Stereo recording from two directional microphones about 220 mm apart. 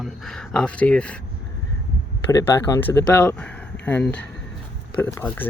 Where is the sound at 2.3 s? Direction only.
15° left (ahead or behind).